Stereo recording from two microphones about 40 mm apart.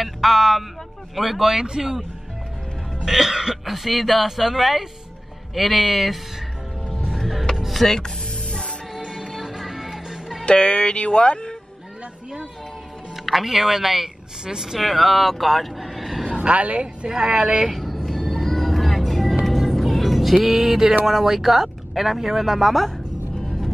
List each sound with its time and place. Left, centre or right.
0.0 s a sound: centre
1.1 s speech: centre
3.1 s speech: centre
7.1 s music: centre
8.5 s music: left
8.9 s music: centre
10.4 s speech: left
13.1 s speech: centre
14.8 s speech: centre
16.3 s speech: right
16.8 s speech: centre
17.6 s vehicle: centre
18.4 s music: centre
21.0 s speech: centre